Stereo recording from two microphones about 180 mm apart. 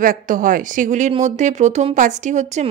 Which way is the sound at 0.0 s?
50° right (ahead or behind).